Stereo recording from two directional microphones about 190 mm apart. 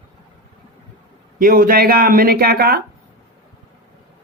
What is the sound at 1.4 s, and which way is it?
Speech, 50° right (ahead or behind).